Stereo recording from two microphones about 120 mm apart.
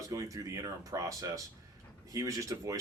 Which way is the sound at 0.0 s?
25° right (ahead or behind).